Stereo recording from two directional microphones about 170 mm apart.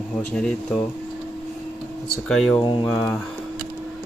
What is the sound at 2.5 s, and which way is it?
Speech, 25° left (ahead or behind).